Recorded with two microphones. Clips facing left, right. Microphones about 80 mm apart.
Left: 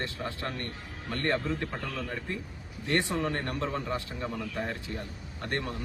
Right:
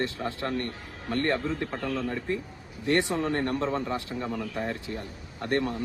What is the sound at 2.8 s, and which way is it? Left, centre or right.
A man's voice, right.